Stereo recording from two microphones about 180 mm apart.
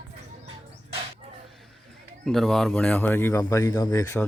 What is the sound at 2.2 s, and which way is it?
Speech, centre (ahead or behind).